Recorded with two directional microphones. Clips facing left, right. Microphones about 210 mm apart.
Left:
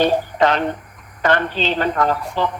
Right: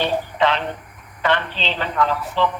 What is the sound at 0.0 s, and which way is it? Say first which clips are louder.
Speech: left 4 dB; 45° left (ahead or behind).